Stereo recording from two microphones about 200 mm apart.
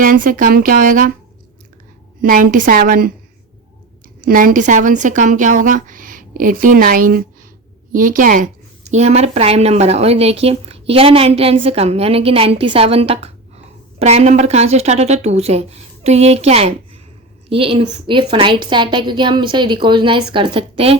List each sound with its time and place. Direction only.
0.0 s speech: 45° right (ahead or behind)
2.2 s speech: 40° right (ahead or behind)
4.2 s a woman's voice: 45° right (ahead or behind)